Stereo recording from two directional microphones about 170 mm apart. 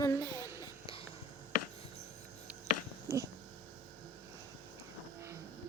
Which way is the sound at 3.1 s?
15° right (ahead or behind).